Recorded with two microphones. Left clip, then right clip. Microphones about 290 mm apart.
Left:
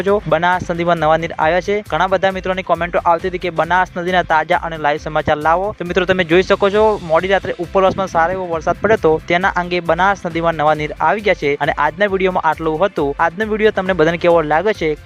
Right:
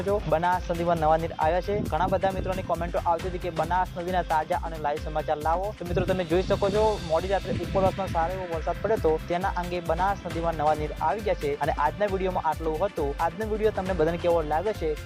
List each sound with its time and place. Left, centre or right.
0.1 s speech: left
9.0 s speech: left